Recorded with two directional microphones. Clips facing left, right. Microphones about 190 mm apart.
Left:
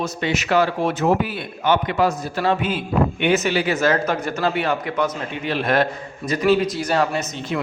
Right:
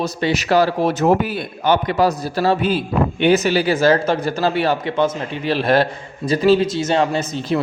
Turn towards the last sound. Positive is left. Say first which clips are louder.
# right 4 dB
turn(degrees=-30)  # may be behind; listen again after turning